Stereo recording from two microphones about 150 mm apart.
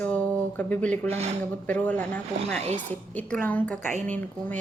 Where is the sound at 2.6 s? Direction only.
45° right (ahead or behind).